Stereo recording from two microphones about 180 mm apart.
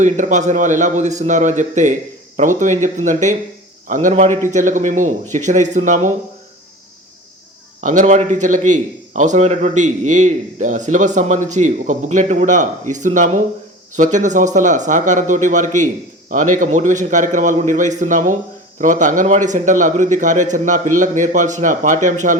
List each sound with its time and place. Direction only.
0.0 s a man's voice: 40° right (ahead or behind)
7.8 s a man's voice: 45° right (ahead or behind)